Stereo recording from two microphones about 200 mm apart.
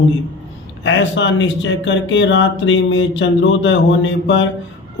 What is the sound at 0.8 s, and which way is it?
Speech, 65° left (ahead or behind).